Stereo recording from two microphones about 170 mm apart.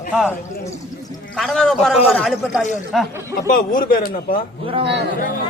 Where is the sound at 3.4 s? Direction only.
50° left (ahead or behind).